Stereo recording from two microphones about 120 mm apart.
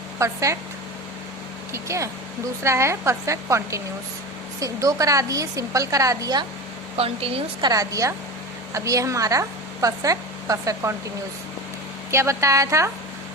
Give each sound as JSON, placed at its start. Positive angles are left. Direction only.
{"t": 0.2, "sound": "a woman's voice", "side_deg": -25}
{"t": 1.7, "sound": "a woman's voice", "side_deg": -25}
{"t": 6.9, "sound": "speech", "side_deg": -55}
{"t": 7.6, "sound": "a woman's voice", "side_deg": -30}
{"t": 12.1, "sound": "a woman's voice", "side_deg": -25}